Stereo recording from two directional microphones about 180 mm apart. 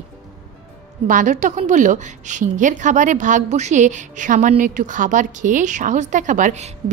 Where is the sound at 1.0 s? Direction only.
45° right (ahead or behind).